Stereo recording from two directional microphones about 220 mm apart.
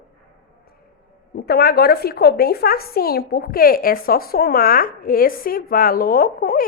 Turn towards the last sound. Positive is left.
turn(degrees=40)  # may be behind; listen again after turning